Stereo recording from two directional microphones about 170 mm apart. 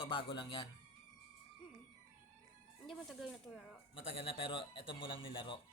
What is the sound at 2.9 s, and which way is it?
Speech, centre (ahead or behind).